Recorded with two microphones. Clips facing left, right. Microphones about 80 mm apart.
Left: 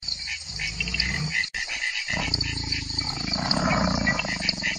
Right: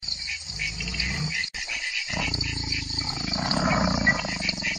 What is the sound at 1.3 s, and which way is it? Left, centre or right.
Dog, left.